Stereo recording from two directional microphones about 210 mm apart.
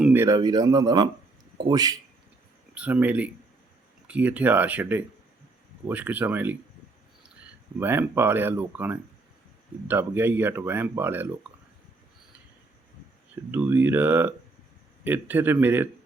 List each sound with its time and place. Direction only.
0.0 s speech: 10° right (ahead or behind)
2.7 s speech: 5° right (ahead or behind)
7.8 s speech: 10° right (ahead or behind)
13.5 s speech: 10° right (ahead or behind)